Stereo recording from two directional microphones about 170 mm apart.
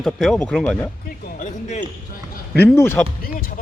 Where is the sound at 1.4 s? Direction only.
45° left (ahead or behind).